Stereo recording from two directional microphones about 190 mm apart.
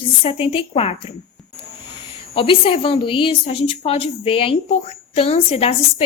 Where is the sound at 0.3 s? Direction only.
30° left (ahead or behind).